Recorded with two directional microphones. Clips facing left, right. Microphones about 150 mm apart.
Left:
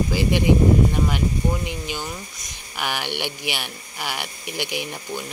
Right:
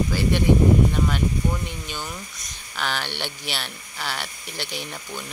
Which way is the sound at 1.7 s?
15° left (ahead or behind).